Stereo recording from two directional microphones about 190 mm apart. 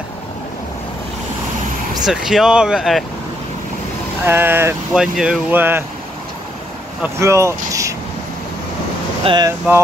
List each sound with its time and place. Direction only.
2.0 s speech: centre (ahead or behind)
4.3 s speech: 10° right (ahead or behind)
7.0 s speech: 15° right (ahead or behind)
9.2 s speech: 25° right (ahead or behind)